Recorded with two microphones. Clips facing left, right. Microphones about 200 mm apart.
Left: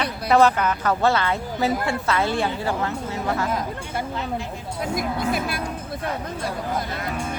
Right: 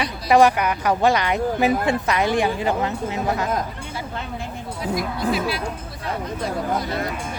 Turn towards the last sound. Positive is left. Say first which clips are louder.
# right 1 dB
turn(degrees=50)  # may be behind; listen again after turning